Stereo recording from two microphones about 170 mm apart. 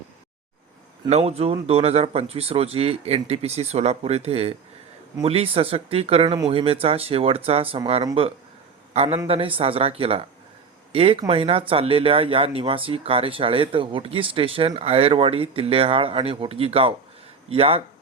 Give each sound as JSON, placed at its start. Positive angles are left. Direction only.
{"t": 1.1, "sound": "a man's voice", "side_deg": -40}